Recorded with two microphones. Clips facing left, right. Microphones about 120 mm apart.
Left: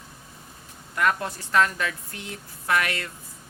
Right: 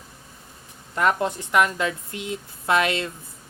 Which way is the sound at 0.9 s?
20° right (ahead or behind).